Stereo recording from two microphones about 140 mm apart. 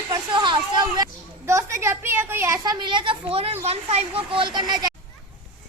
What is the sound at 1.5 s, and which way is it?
A woman's voice, 20° right (ahead or behind).